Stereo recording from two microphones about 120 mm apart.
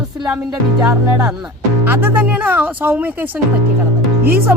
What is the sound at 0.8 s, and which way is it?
Speech, 5° right (ahead or behind).